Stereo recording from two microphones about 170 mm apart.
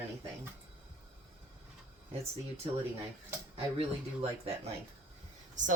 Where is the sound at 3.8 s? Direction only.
40° right (ahead or behind).